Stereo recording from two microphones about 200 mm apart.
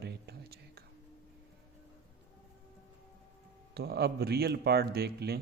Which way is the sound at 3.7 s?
55° right (ahead or behind).